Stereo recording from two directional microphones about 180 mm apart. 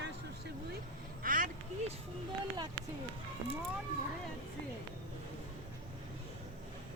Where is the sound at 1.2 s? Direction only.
50° right (ahead or behind).